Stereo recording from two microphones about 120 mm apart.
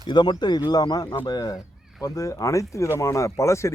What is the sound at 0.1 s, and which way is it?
Speech, 40° left (ahead or behind).